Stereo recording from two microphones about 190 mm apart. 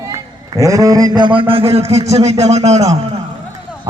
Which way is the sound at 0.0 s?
15° right (ahead or behind).